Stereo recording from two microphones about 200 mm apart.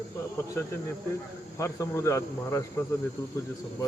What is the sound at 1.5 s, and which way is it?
Speech, 15° left (ahead or behind).